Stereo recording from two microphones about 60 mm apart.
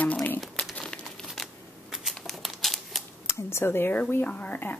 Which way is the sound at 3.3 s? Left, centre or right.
Left.